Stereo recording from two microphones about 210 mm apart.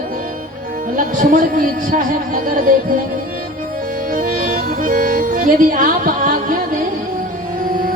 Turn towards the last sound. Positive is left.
turn(degrees=-40)  # may be behind; listen again after turning